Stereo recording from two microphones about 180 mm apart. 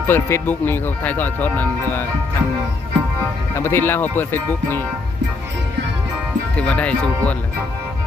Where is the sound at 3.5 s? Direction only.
15° left (ahead or behind).